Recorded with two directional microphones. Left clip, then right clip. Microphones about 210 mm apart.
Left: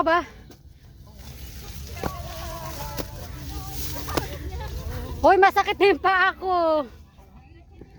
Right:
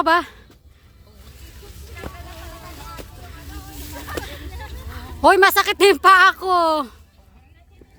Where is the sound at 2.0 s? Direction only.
55° left (ahead or behind).